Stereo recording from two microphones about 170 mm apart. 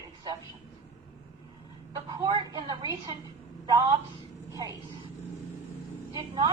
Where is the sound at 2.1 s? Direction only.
25° right (ahead or behind).